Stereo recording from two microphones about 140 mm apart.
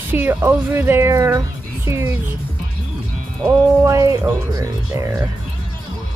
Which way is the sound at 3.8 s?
20° right (ahead or behind).